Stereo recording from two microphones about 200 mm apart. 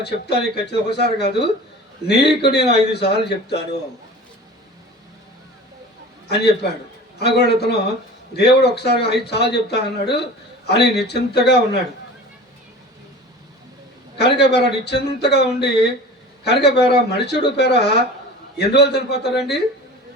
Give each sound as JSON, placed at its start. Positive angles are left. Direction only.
{"t": 0.0, "sound": "speech", "side_deg": 55}
{"t": 6.2, "sound": "a man's voice", "side_deg": 55}
{"t": 14.2, "sound": "speech", "side_deg": 55}